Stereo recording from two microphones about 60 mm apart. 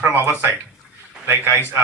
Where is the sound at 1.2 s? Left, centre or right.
Right.